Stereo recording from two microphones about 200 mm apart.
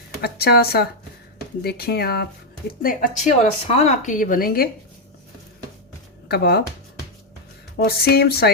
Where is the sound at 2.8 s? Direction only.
40° left (ahead or behind).